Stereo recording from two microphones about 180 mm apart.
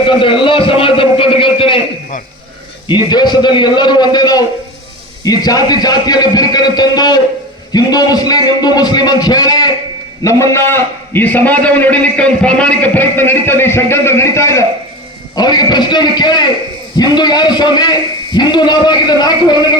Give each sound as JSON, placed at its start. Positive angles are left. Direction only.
{"t": 0.0, "sound": "a man's voice", "side_deg": 30}
{"t": 2.9, "sound": "a man's voice", "side_deg": 25}